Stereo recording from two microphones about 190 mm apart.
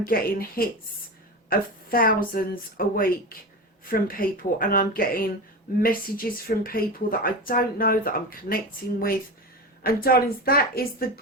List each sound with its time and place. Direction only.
0.0 s speech: 50° left (ahead or behind)